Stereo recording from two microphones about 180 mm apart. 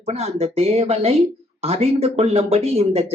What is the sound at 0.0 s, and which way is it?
Speech, 35° right (ahead or behind).